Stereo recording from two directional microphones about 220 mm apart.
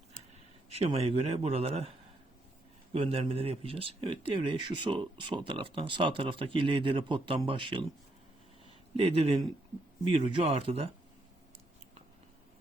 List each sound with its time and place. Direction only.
0.7 s speech: 25° right (ahead or behind)
2.9 s speech: 25° right (ahead or behind)